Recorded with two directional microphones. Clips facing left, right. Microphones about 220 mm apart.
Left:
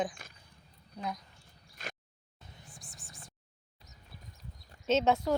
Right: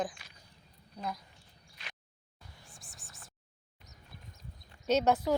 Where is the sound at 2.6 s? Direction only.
Centre (ahead or behind).